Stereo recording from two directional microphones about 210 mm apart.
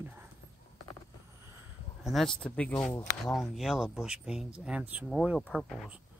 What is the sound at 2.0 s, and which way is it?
Speech, centre (ahead or behind).